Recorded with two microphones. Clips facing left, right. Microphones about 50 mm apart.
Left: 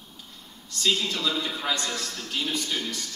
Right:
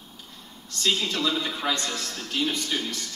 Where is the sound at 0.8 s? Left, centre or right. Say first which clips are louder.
Right 1 dB; right.